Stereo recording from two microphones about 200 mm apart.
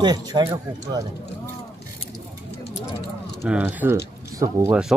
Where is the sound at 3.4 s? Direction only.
5° right (ahead or behind).